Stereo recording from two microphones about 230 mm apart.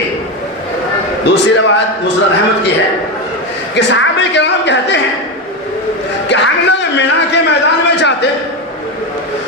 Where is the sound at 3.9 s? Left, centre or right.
Left.